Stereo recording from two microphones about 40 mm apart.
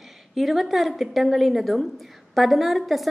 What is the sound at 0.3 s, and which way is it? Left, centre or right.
A woman's voice, centre.